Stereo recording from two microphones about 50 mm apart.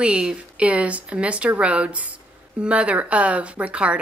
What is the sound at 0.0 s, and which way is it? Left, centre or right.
Speech, centre.